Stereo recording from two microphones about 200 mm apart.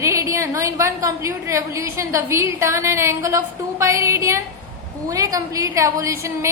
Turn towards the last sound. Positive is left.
turn(degrees=-15)  # may be behind; listen again after turning